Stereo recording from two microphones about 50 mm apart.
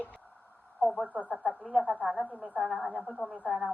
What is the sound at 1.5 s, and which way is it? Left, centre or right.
Speech, centre.